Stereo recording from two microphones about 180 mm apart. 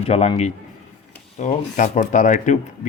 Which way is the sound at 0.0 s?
35° left (ahead or behind).